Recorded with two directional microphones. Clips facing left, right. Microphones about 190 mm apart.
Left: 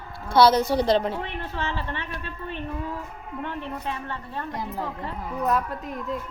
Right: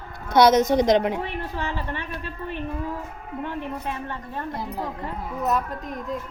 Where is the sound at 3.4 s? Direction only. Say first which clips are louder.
Right 1 dB; 15° right (ahead or behind).